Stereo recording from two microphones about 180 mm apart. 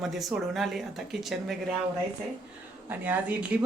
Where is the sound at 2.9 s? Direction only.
10° right (ahead or behind).